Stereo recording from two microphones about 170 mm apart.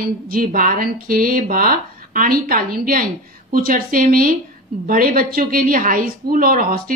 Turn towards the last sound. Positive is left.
turn(degrees=-60)  # may be behind; listen again after turning